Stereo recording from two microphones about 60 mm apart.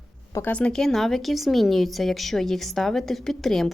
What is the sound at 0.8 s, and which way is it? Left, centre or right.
A woman's voice, centre.